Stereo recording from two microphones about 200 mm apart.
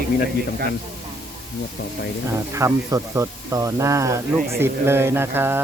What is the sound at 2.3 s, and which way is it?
Speech, 15° right (ahead or behind).